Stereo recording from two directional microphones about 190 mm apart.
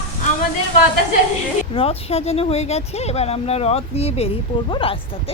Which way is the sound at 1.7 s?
30° left (ahead or behind).